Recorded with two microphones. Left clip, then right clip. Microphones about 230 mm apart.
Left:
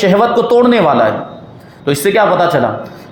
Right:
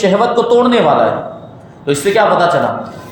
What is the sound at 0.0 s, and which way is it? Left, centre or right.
A man's voice, left.